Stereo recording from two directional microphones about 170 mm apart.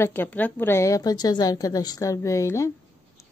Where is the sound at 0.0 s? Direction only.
10° left (ahead or behind).